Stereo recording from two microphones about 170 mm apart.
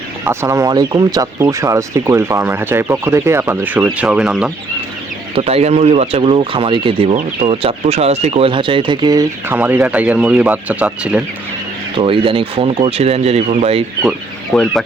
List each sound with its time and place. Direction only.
0.3 s speech: 15° right (ahead or behind)
5.3 s speech: 35° right (ahead or behind)
9.5 s speech: 10° right (ahead or behind)
11.9 s speech: 30° right (ahead or behind)
14.5 s speech: centre (ahead or behind)